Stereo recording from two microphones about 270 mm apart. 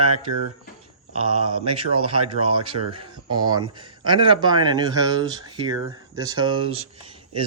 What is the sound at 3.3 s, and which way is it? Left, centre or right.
Speech, centre.